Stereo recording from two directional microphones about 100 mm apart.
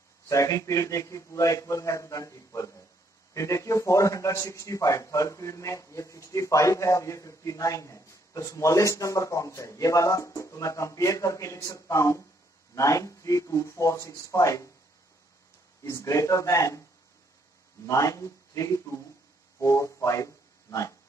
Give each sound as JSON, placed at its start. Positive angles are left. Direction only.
{"t": 0.3, "sound": "a man's voice", "side_deg": 30}
{"t": 15.8, "sound": "a man's voice", "side_deg": 30}
{"t": 17.8, "sound": "a man's voice", "side_deg": 30}